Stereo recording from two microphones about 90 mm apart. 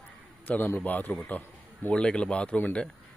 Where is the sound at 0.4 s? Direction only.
20° left (ahead or behind).